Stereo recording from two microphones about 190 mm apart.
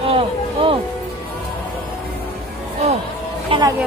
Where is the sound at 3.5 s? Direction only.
20° right (ahead or behind).